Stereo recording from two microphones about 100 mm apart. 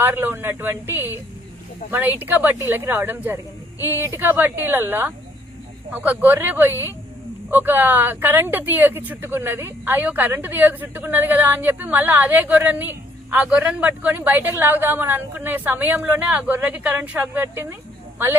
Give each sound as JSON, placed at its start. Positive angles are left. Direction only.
{"t": 0.0, "sound": "speech", "side_deg": -20}